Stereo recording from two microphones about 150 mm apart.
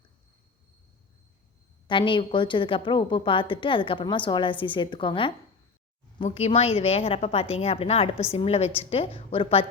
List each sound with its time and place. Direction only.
1.9 s a woman's voice: 35° left (ahead or behind)